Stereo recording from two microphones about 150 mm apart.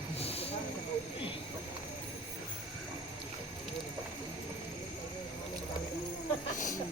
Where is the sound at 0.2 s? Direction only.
40° left (ahead or behind).